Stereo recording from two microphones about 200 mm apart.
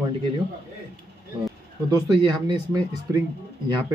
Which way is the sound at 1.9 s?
20° right (ahead or behind).